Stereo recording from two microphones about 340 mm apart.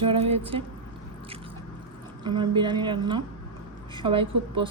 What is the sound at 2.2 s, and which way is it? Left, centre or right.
A woman's voice, centre.